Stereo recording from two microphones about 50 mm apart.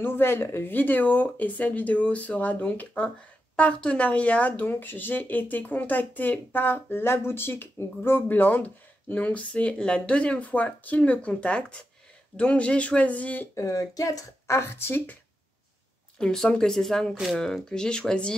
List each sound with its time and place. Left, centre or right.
0.0 s speech: left
3.5 s speech: left
14.5 s speech: left
16.2 s speech: centre